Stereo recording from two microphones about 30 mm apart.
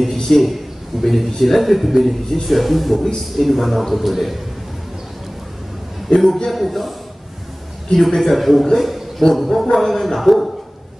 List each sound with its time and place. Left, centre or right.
0.1 s a man's voice: centre
6.1 s a sound: left
6.5 s speech: centre
7.9 s a man's voice: centre
8.2 s a man's voice: centre